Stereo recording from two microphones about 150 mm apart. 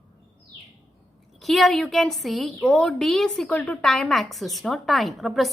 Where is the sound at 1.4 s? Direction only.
Centre (ahead or behind).